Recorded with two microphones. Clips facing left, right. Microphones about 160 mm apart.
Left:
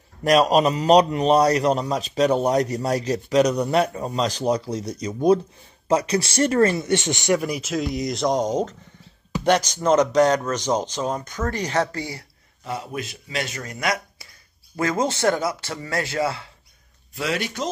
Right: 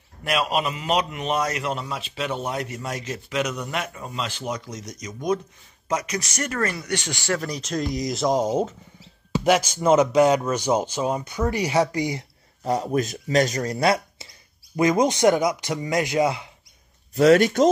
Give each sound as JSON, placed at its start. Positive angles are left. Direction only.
{"t": 0.2, "sound": "a man's voice", "side_deg": 40}
{"t": 12.6, "sound": "speech", "side_deg": -40}
{"t": 14.8, "sound": "speech", "side_deg": -15}
{"t": 17.1, "sound": "speech", "side_deg": -45}